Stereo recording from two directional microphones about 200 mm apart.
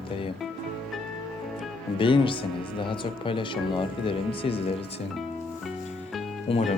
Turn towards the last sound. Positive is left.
turn(degrees=30)  # may be behind; listen again after turning